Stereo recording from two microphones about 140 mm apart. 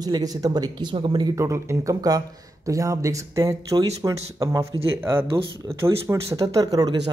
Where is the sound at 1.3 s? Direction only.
20° right (ahead or behind).